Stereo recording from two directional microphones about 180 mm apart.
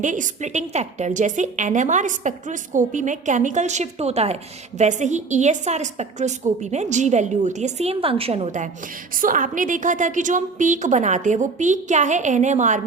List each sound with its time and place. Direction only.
0.0 s a woman's voice: 45° right (ahead or behind)